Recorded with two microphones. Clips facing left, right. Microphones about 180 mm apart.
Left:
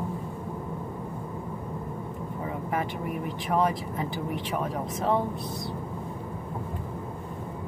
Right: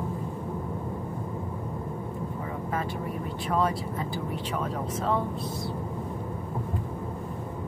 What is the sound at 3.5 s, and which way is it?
Speech, 15° left (ahead or behind).